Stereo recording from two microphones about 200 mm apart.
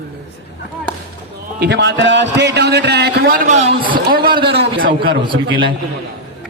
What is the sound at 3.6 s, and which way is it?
Speech, 30° right (ahead or behind).